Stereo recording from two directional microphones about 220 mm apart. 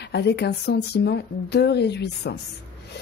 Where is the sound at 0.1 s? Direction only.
50° left (ahead or behind).